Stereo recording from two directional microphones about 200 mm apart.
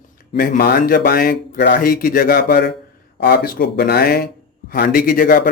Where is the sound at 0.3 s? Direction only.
50° left (ahead or behind).